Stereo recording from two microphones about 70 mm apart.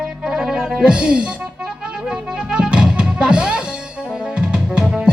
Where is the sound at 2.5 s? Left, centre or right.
Centre.